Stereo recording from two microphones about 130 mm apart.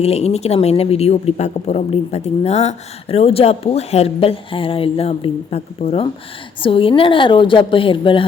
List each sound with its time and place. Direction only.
0.0 s a woman's voice: 50° left (ahead or behind)